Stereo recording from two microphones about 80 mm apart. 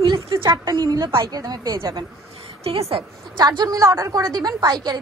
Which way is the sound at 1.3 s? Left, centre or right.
Right.